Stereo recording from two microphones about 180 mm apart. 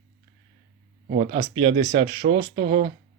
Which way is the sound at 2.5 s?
60° right (ahead or behind).